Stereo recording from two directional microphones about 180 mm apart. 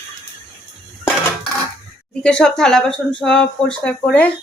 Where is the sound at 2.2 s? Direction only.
5° left (ahead or behind).